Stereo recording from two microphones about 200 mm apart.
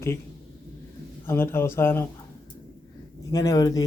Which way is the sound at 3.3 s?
15° left (ahead or behind).